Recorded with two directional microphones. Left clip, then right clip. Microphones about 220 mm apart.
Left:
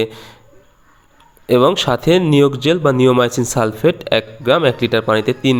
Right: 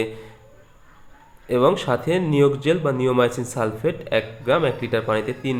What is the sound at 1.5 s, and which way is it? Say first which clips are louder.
Speech: left 6 dB; 40° left (ahead or behind).